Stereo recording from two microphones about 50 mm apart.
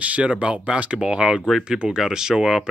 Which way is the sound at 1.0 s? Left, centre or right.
Centre.